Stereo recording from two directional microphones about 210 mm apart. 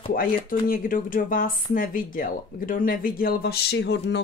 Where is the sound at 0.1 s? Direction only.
45° left (ahead or behind).